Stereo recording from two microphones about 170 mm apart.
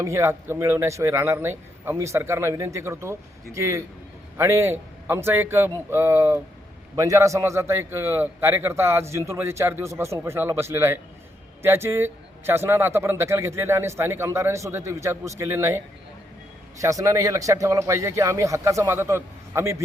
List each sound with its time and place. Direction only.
0.0 s a man's voice: 15° right (ahead or behind)